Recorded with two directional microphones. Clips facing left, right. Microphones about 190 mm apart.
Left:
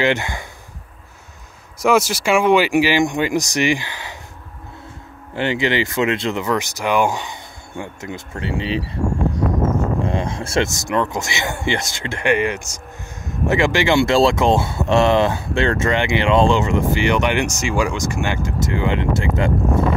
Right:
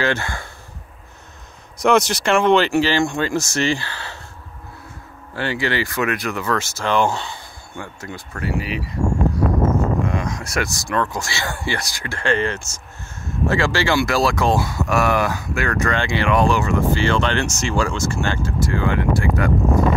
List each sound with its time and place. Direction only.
0.0 s speech: 20° left (ahead or behind)
1.8 s speech: 5° left (ahead or behind)
5.3 s speech: 20° left (ahead or behind)
10.0 s speech: 30° left (ahead or behind)